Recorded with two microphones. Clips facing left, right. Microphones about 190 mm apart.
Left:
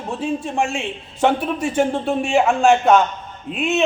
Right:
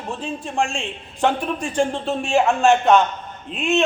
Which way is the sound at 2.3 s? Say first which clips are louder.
Left 1 dB; centre (ahead or behind).